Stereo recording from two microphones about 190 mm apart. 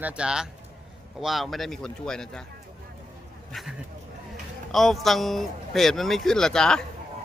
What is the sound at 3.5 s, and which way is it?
Speech, centre (ahead or behind).